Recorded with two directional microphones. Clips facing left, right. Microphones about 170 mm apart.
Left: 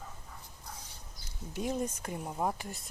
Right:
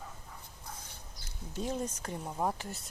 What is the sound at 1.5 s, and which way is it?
Speech, 10° left (ahead or behind).